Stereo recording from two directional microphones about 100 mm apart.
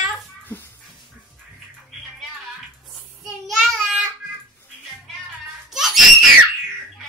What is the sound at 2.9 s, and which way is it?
Child singing, centre (ahead or behind).